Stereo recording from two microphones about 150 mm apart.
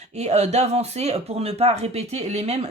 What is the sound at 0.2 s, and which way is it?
Speech, 45° right (ahead or behind).